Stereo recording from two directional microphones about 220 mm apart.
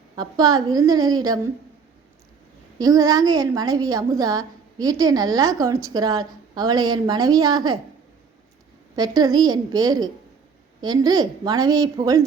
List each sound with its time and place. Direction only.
0.2 s a woman's voice: 15° right (ahead or behind)
2.7 s a woman's voice: 15° right (ahead or behind)
9.0 s a woman's voice: 20° right (ahead or behind)